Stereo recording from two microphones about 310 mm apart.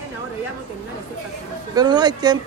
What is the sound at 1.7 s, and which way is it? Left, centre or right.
Speech, centre.